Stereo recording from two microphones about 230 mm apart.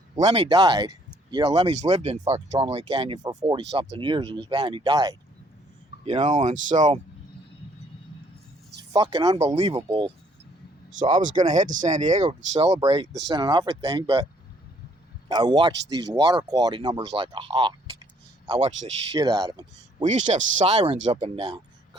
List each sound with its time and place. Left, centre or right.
0.2 s speech: right
6.1 s speech: right
8.9 s speech: centre
11.0 s speech: right; by 14.3 s centre
15.3 s speech: centre
20.1 s speech: right